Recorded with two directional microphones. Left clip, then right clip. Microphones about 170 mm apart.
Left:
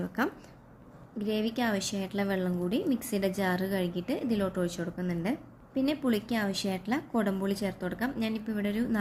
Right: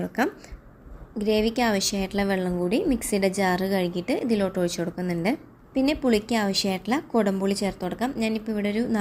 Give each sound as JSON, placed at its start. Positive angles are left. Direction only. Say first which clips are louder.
{"t": 0.2, "sound": "a woman's voice", "louder": "right 6 dB", "side_deg": -20}
{"t": 1.2, "sound": "a woman's voice", "louder": "right 8 dB", "side_deg": -30}